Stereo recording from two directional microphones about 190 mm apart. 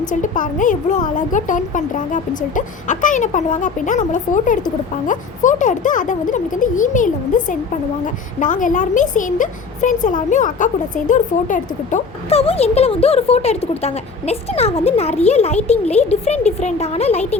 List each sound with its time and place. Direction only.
0.1 s speech: 45° left (ahead or behind)